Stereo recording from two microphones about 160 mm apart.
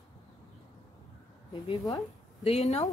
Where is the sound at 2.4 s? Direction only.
45° left (ahead or behind).